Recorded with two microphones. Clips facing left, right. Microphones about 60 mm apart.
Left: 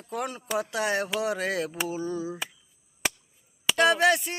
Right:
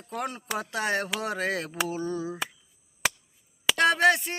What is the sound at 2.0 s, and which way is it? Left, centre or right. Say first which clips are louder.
Music: even; right.